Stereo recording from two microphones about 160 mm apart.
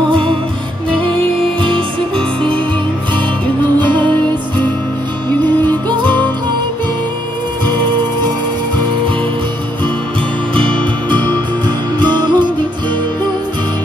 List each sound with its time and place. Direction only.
0.1 s music: 35° right (ahead or behind)
1.6 s music: 30° right (ahead or behind)
3.8 s music: 30° right (ahead or behind)
12.1 s music: 30° right (ahead or behind)